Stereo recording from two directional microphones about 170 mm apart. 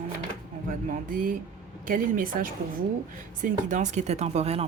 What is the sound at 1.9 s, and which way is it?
A woman's voice, 55° right (ahead or behind).